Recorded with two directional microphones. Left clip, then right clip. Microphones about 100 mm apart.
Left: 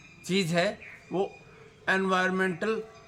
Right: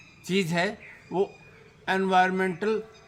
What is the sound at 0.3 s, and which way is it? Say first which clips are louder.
A man's voice: even; 30° left (ahead or behind).